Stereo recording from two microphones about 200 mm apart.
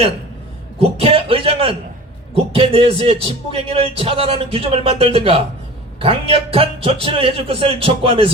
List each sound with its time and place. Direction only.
0.8 s a man's voice: 30° right (ahead or behind)